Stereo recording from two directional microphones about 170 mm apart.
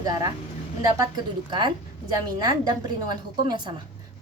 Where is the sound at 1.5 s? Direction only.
30° right (ahead or behind).